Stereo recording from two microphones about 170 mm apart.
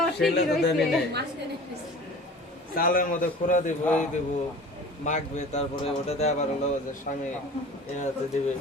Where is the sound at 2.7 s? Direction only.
55° left (ahead or behind).